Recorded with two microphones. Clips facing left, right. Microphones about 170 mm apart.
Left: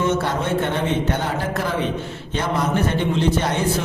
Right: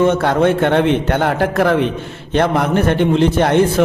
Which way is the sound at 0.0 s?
60° right (ahead or behind).